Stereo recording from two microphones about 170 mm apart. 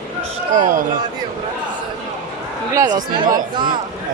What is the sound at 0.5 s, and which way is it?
Speech, 50° right (ahead or behind).